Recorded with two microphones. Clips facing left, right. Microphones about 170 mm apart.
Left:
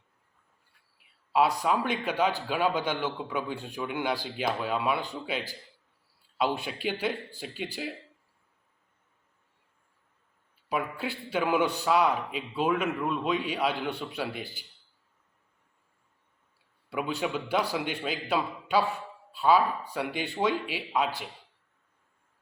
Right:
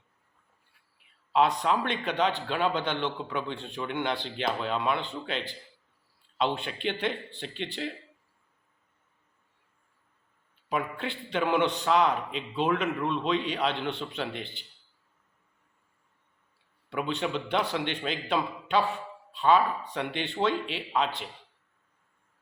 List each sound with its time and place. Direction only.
1.3 s a man's voice: 5° left (ahead or behind)
10.7 s a man's voice: 5° left (ahead or behind)
16.9 s a man's voice: 5° left (ahead or behind)